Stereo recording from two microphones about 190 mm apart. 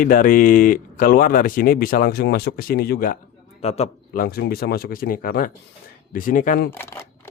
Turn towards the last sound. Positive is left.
turn(degrees=10)  # may be behind; listen again after turning